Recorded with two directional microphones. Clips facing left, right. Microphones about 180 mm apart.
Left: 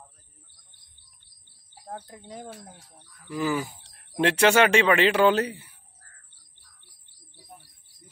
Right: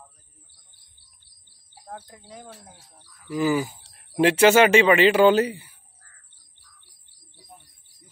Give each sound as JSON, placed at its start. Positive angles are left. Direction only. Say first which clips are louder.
{"t": 2.7, "sound": "speech", "louder": "left 1 dB", "side_deg": -5}